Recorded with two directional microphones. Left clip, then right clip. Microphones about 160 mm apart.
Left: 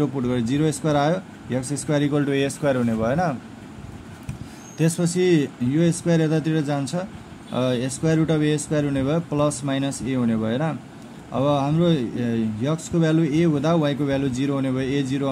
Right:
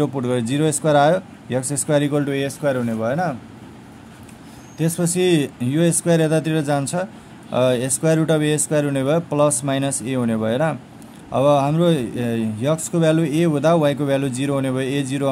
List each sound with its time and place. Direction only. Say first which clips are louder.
0.0 s speech: right 3 dB; 20° right (ahead or behind); by 3.3 s centre (ahead or behind)
4.7 s speech: even; 5° right (ahead or behind)
5.0 s speech: right 2 dB; 20° right (ahead or behind)